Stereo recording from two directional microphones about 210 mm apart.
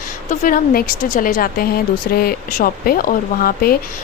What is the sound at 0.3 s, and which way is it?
A woman's voice, 40° left (ahead or behind).